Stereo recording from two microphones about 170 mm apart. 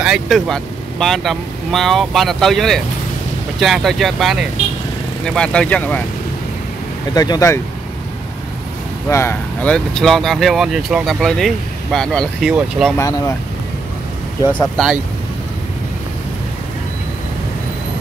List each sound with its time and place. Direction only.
0.0 s speech: centre (ahead or behind)
7.2 s speech: 20° left (ahead or behind)
9.1 s speech: 15° left (ahead or behind); by 12.9 s 5° right (ahead or behind)